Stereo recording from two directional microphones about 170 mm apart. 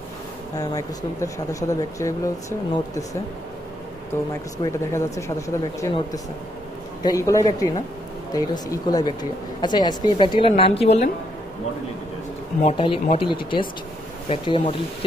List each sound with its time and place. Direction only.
0.6 s speech: 20° left (ahead or behind)
4.3 s speech: 20° left (ahead or behind)
7.0 s a woman's voice: 20° left (ahead or behind); by 11.1 s 40° left (ahead or behind)
12.6 s speech: 30° left (ahead or behind)